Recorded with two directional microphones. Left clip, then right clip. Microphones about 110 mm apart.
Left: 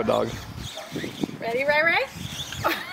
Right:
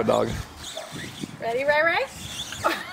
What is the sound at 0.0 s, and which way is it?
Speech, 15° right (ahead or behind).